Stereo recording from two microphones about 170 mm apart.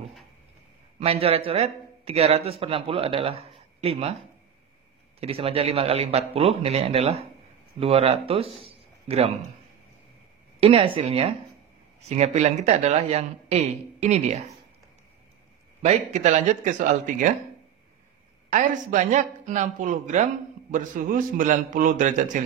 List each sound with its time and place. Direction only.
0.9 s a man's voice: 35° right (ahead or behind)
5.2 s speech: 35° right (ahead or behind)
10.6 s speech: 35° right (ahead or behind)
15.8 s speech: 40° right (ahead or behind)
18.5 s speech: 50° right (ahead or behind)